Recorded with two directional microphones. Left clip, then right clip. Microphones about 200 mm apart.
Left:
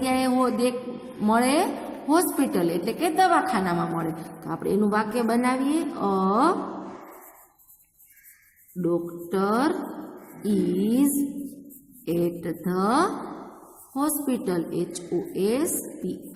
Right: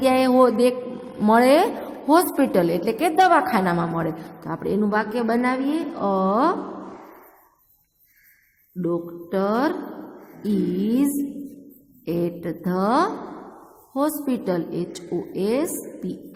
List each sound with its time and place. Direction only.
0.0 s a sound: 35° right (ahead or behind)
1.2 s a woman's voice: 30° right (ahead or behind)
8.8 s a woman's voice: 15° right (ahead or behind)